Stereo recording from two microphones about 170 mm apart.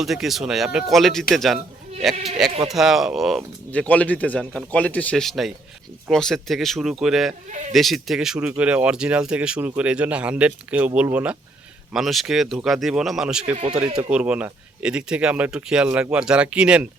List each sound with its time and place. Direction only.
0.0 s speech: centre (ahead or behind)
13.6 s speech: 30° right (ahead or behind)
14.1 s speech: 10° right (ahead or behind)